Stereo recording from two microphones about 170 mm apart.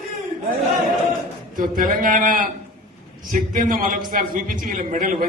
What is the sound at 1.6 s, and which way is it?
A man's voice, 55° right (ahead or behind).